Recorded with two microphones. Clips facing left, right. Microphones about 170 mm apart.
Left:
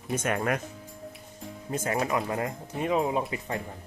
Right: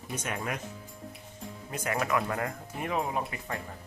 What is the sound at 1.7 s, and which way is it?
Speech, 30° left (ahead or behind).